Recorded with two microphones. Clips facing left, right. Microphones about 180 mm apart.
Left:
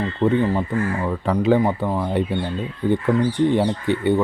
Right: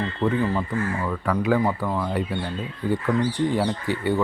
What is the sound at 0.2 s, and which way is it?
Speech, 20° left (ahead or behind).